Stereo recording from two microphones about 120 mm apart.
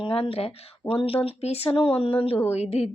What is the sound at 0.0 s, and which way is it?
Speech, 50° left (ahead or behind).